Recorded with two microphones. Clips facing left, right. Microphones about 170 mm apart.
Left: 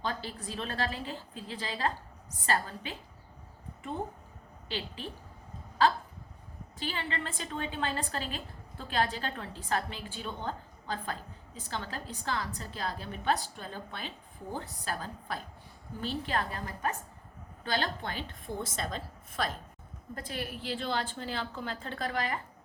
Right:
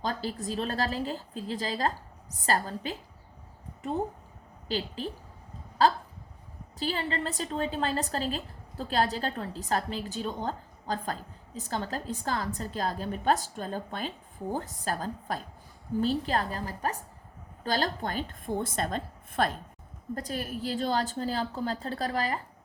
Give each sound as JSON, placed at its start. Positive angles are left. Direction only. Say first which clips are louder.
{"t": 0.0, "sound": "a woman's voice", "louder": "right 4 dB", "side_deg": -40}
{"t": 5.8, "sound": "a woman's voice", "louder": "right 3 dB", "side_deg": -35}